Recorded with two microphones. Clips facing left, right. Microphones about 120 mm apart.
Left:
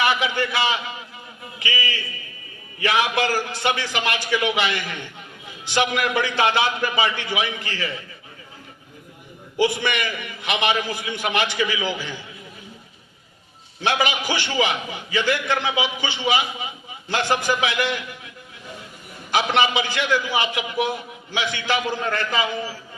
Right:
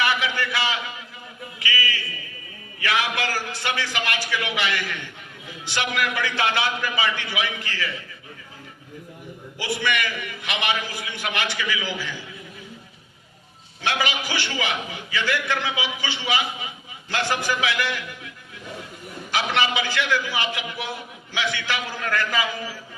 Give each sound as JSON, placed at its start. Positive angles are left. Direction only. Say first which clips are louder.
{"t": 0.0, "sound": "a sound", "louder": "left 3 dB", "side_deg": 20}
{"t": 1.5, "sound": "a man's voice", "louder": "left 1 dB", "side_deg": 25}
{"t": 9.6, "sound": "a man's voice", "louder": "left 4 dB", "side_deg": 20}
{"t": 13.8, "sound": "a man's voice", "louder": "left 4 dB", "side_deg": 20}
{"t": 19.3, "sound": "a man's voice", "louder": "left 4 dB", "side_deg": 20}